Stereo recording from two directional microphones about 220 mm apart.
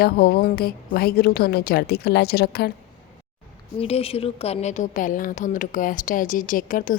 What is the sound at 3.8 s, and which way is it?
A woman's voice, 25° left (ahead or behind).